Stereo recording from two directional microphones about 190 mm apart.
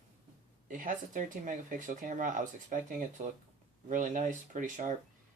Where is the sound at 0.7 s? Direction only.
45° right (ahead or behind).